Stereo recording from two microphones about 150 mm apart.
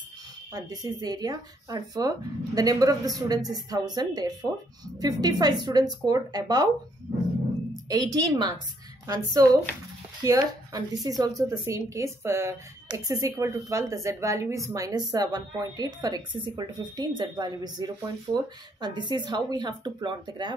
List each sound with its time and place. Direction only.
0.5 s a woman's voice: 25° right (ahead or behind)
7.9 s a woman's voice: 25° right (ahead or behind)